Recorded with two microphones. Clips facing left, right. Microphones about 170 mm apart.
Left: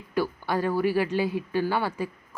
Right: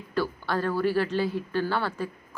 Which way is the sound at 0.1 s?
15° left (ahead or behind).